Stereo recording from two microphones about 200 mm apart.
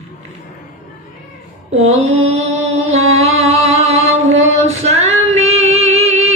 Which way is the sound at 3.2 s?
30° right (ahead or behind).